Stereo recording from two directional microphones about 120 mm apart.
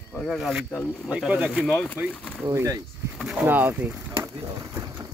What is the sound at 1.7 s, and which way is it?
Speech, 15° left (ahead or behind).